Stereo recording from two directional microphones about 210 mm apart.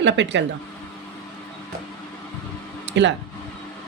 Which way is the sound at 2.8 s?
60° right (ahead or behind).